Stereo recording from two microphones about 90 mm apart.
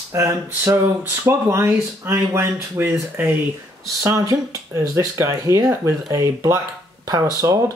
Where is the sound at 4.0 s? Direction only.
35° right (ahead or behind).